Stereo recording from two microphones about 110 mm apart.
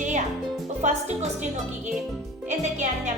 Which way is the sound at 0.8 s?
90° right.